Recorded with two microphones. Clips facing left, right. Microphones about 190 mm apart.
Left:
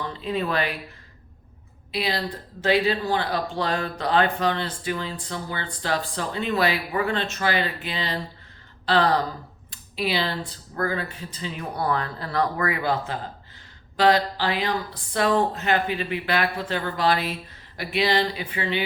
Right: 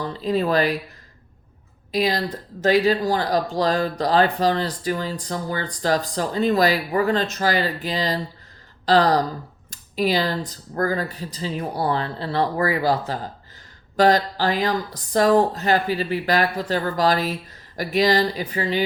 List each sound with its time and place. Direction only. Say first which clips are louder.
0.0 s speech: right 5 dB; 35° right (ahead or behind)
1.9 s speech: right 5 dB; 40° right (ahead or behind)